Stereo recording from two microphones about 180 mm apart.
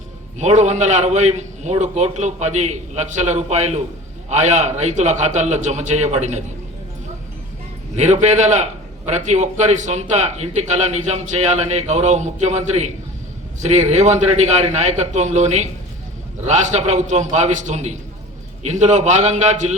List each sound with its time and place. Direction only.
0.3 s a man's voice: 40° right (ahead or behind)
7.9 s a man's voice: 40° right (ahead or behind)